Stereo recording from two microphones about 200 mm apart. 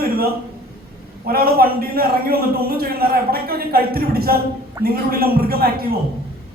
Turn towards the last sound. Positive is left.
turn(degrees=-50)  # may be behind; listen again after turning